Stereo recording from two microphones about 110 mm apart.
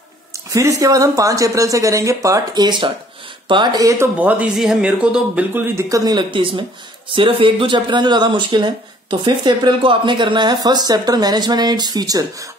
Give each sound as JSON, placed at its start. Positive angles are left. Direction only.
{"t": 0.5, "sound": "a woman's voice", "side_deg": -30}
{"t": 4.2, "sound": "speech", "side_deg": -15}
{"t": 5.5, "sound": "a woman's voice", "side_deg": -25}
{"t": 6.1, "sound": "speech", "side_deg": -50}